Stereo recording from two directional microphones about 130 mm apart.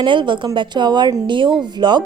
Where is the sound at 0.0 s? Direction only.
40° right (ahead or behind).